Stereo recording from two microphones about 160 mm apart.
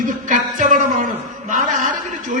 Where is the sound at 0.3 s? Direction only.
55° right (ahead or behind).